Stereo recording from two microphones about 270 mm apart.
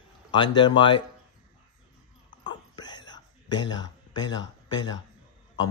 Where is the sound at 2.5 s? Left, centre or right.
Centre.